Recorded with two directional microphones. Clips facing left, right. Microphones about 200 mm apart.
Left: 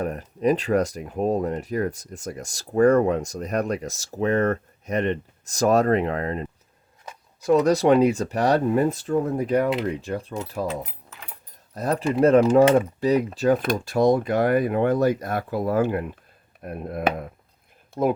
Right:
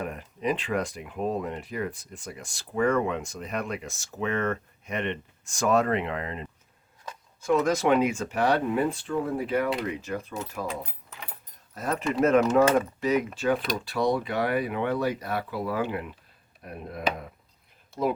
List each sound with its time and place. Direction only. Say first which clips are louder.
0.0 s speech: left 7 dB; 40° left (ahead or behind)
11.7 s speech: left 5 dB; 35° left (ahead or behind); by 17.2 s 55° left (ahead or behind)